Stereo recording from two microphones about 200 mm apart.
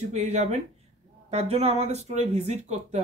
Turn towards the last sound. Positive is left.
turn(degrees=-35)  # may be behind; listen again after turning